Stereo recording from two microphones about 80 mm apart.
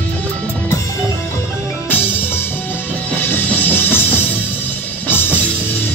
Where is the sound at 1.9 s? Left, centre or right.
Left.